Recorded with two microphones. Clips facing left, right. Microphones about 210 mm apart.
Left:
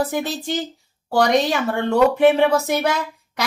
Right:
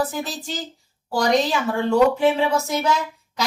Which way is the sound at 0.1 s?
65° left (ahead or behind).